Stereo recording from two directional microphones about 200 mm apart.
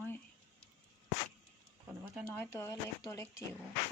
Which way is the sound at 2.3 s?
10° left (ahead or behind).